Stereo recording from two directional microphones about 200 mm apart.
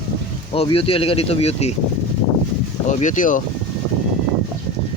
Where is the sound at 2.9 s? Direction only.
40° left (ahead or behind).